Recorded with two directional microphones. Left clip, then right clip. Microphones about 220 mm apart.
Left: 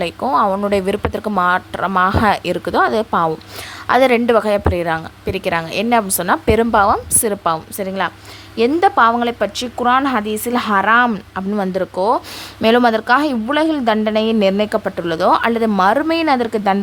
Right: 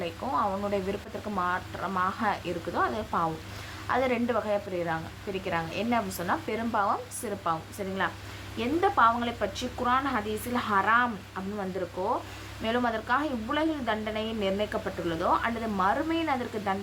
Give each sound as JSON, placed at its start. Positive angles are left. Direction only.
{"t": 0.0, "sound": "a woman's voice", "side_deg": 45}